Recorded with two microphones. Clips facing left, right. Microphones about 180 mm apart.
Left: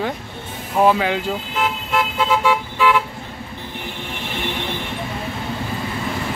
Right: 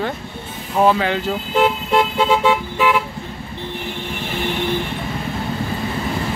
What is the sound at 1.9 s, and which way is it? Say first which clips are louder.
Vehicle: right 3 dB; 30° right (ahead or behind).